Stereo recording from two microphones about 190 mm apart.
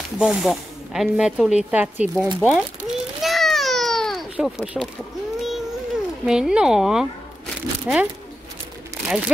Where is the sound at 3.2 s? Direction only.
Centre (ahead or behind).